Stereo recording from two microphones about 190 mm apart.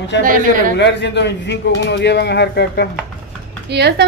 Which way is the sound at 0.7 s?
65° left (ahead or behind).